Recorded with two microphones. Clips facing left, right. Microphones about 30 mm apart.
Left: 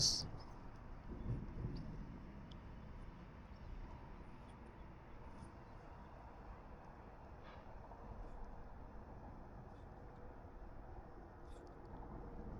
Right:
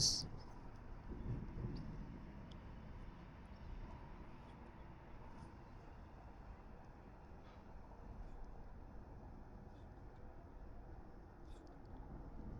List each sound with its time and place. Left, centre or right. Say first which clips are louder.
0.0 s vehicle: left 1 dB; centre